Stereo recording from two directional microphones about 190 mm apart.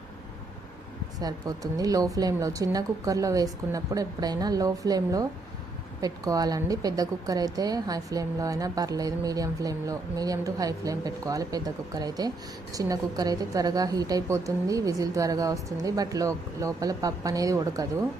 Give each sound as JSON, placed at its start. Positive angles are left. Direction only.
{"t": 1.2, "sound": "a woman's voice", "side_deg": -20}